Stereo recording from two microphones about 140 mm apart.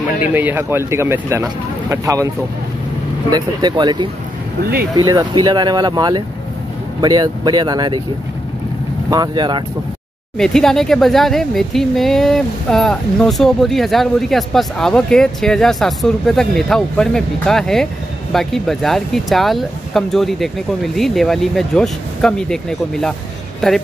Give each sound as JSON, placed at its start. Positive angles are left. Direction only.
{"t": 0.3, "sound": "speech", "side_deg": -15}
{"t": 9.1, "sound": "speech", "side_deg": -30}
{"t": 10.3, "sound": "speech", "side_deg": 5}